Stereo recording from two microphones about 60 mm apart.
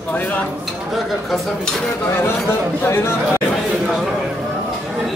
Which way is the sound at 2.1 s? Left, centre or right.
Left.